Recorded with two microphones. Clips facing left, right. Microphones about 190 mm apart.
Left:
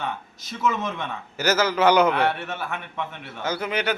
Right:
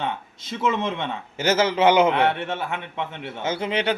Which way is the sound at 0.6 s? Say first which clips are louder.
Right 2 dB; 25° right (ahead or behind).